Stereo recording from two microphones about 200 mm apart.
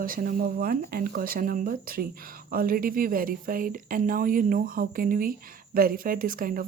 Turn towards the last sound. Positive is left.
turn(degrees=-45)  # may be behind; listen again after turning